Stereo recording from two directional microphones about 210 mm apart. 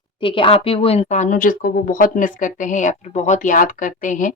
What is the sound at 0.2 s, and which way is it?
Speech, 25° left (ahead or behind).